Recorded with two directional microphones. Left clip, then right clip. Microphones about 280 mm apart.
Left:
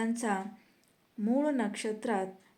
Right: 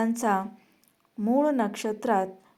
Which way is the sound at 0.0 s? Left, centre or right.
Centre.